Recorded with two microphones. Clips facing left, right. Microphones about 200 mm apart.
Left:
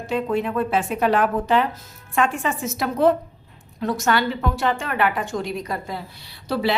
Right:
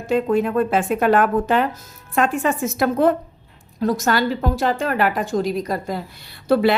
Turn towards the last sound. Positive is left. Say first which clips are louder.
# right 6 dB
turn(degrees=-50)  # may be behind; listen again after turning